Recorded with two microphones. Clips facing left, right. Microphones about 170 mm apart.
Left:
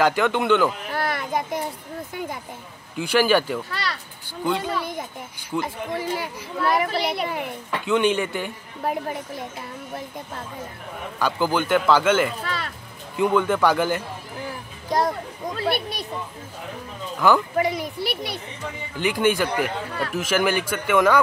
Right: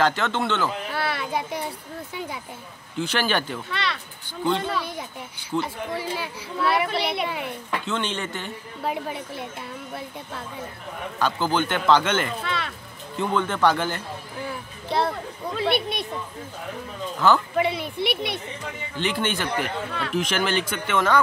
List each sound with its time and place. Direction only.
0.0 s speech: 10° left (ahead or behind)
3.0 s speech: 10° left (ahead or behind)
6.9 s a woman's voice: 5° left (ahead or behind)
11.1 s a woman's voice: 10° left (ahead or behind)
17.2 s speech: 15° left (ahead or behind)
17.8 s speech: 35° left (ahead or behind)
18.9 s speech: 10° left (ahead or behind)